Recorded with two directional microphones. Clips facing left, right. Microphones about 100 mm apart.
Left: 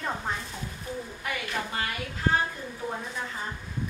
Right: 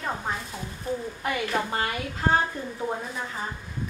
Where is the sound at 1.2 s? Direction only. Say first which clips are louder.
Right 5 dB; 35° right (ahead or behind).